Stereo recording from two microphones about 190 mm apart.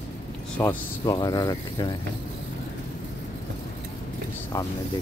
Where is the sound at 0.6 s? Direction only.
10° left (ahead or behind).